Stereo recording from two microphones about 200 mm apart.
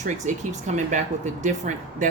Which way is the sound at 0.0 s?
35° right (ahead or behind).